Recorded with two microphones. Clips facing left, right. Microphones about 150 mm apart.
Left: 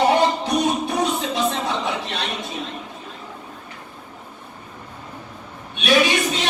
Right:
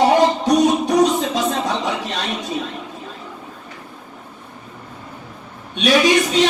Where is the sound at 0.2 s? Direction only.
40° right (ahead or behind).